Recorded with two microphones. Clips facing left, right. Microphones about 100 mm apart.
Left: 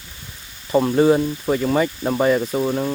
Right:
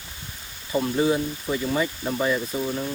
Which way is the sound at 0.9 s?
55° left (ahead or behind).